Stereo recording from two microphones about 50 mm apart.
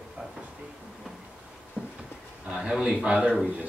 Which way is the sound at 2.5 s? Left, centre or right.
Centre.